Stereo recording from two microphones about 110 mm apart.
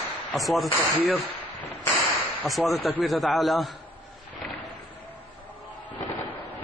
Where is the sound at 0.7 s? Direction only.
15° left (ahead or behind).